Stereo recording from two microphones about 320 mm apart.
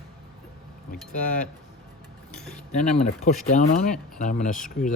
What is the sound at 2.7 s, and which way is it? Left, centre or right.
Speech, left.